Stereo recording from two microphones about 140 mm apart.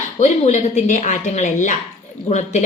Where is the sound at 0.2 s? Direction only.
55° left (ahead or behind).